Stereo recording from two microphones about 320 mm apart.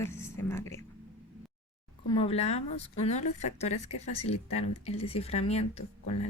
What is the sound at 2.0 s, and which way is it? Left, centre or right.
Speech, centre.